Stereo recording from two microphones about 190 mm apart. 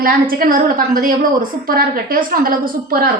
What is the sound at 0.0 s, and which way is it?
A woman's voice, 50° right (ahead or behind).